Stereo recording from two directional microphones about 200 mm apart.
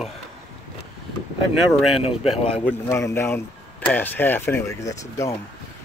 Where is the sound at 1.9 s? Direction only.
30° left (ahead or behind).